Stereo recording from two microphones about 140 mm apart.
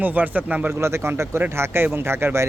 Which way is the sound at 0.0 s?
10° right (ahead or behind).